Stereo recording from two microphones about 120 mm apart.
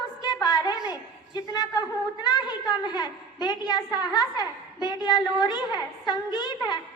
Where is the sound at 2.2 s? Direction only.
35° left (ahead or behind).